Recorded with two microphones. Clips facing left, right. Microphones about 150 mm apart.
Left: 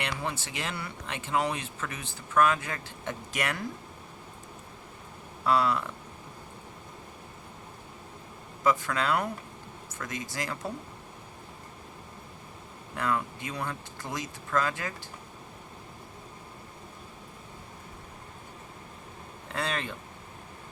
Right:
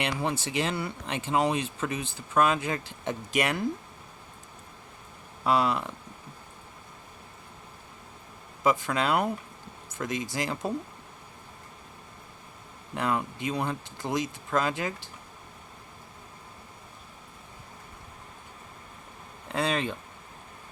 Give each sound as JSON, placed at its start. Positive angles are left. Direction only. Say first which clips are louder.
{"t": 0.0, "sound": "speech", "louder": "right 4 dB", "side_deg": -25}
{"t": 5.5, "sound": "speech", "louder": "right 1 dB", "side_deg": -20}
{"t": 8.6, "sound": "speech", "louder": "right 1 dB", "side_deg": -20}
{"t": 13.0, "sound": "speech", "louder": "right 2 dB", "side_deg": -20}
{"t": 19.5, "sound": "speech", "louder": "right 5 dB", "side_deg": -15}